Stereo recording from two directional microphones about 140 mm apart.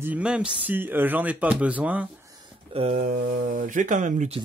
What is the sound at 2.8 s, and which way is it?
Speech, 70° right (ahead or behind).